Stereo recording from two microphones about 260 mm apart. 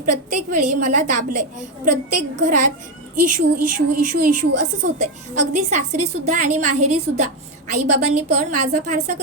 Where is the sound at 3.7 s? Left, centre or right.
Right.